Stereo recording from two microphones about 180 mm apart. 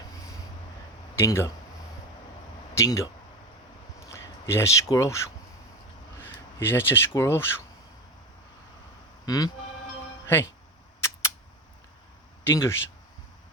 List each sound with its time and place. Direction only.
1.1 s speech: 15° left (ahead or behind)
2.7 s speech: 15° left (ahead or behind)
4.4 s speech: 15° left (ahead or behind)
9.2 s speech: 20° left (ahead or behind)
12.5 s speech: 15° left (ahead or behind)